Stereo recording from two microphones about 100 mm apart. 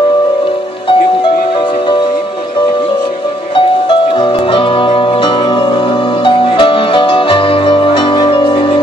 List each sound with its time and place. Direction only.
4.2 s music: 60° left (ahead or behind)